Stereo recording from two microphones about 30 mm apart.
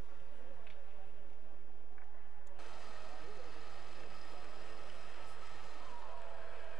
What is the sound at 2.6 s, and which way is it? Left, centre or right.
Vehicle, centre.